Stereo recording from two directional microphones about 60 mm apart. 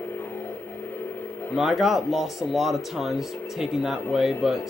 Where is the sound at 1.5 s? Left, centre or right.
Centre.